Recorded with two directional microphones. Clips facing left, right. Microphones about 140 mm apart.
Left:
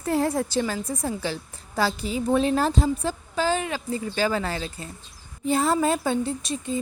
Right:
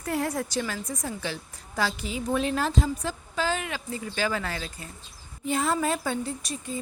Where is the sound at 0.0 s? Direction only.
30° left (ahead or behind).